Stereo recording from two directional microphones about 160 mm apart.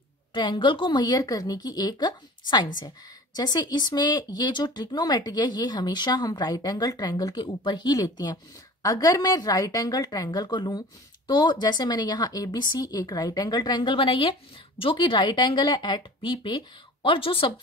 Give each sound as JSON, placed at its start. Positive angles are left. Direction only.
{"t": 0.3, "sound": "a woman's voice", "side_deg": 30}